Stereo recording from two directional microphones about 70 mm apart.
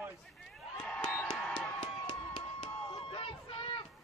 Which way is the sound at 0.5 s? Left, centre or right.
Centre.